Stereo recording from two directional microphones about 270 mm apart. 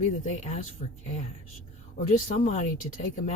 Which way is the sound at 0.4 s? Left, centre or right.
Left.